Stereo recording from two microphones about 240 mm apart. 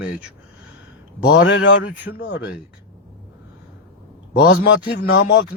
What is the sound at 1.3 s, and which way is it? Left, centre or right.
Speech, left.